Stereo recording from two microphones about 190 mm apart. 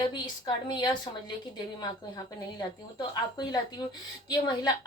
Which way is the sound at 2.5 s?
20° left (ahead or behind).